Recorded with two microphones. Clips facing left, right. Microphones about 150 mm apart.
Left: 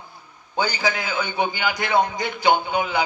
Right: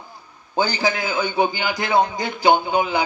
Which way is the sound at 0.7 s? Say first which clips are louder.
Right 3 dB; 45° right (ahead or behind).